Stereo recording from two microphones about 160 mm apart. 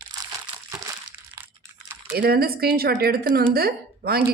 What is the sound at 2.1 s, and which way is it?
A woman's voice, 75° right (ahead or behind).